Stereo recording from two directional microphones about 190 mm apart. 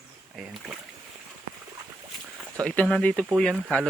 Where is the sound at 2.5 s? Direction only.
5° left (ahead or behind).